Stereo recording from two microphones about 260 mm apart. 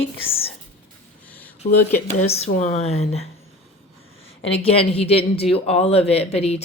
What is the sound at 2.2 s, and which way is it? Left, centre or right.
A woman's voice, left.